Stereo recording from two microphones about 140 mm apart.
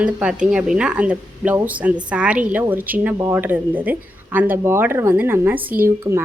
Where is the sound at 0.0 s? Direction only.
5° right (ahead or behind).